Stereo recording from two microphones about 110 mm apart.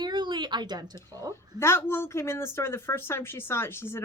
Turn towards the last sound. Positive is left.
turn(degrees=25)  # may be behind; listen again after turning